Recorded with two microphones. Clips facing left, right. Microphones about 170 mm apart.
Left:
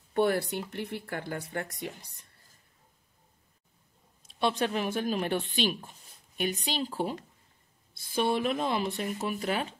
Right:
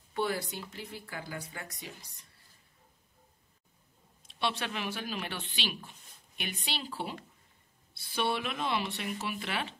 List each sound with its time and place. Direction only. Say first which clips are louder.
0.1 s speech: left 7 dB; 55° left (ahead or behind)
4.3 s speech: left 6 dB; 45° left (ahead or behind)